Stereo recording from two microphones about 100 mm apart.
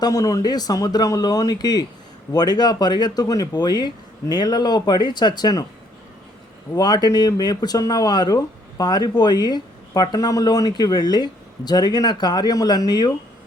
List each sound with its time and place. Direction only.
0.0 s speech: 35° left (ahead or behind)
6.7 s speech: 40° left (ahead or behind)